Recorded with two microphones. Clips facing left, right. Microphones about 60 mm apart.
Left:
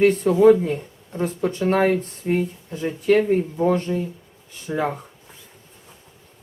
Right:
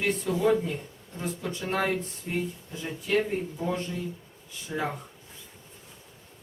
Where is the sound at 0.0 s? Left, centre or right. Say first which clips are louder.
Left 11 dB; left.